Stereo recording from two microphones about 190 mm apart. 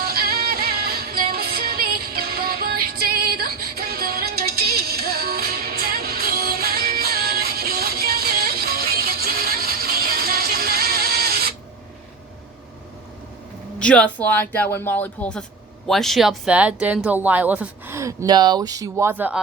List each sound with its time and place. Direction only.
0.0 s music: 50° right (ahead or behind)
13.7 s speech: 5° left (ahead or behind); by 19.4 s 10° right (ahead or behind)